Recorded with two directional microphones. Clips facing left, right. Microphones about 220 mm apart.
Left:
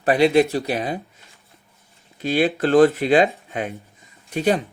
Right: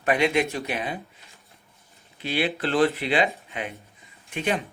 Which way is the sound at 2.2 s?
45° left (ahead or behind).